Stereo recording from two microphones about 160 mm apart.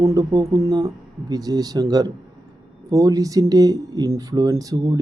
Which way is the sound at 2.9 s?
20° right (ahead or behind).